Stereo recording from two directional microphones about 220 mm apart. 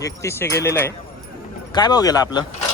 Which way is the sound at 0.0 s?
10° left (ahead or behind).